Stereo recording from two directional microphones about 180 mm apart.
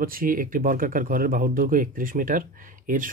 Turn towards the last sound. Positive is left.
turn(degrees=-50)  # may be behind; listen again after turning